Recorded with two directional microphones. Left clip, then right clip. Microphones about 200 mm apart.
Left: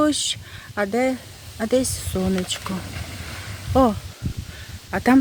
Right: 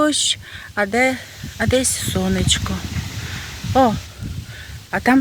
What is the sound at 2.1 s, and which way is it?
Speech, 10° right (ahead or behind).